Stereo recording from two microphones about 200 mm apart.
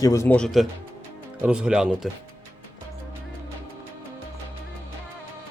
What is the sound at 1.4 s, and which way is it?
Speech, 5° right (ahead or behind).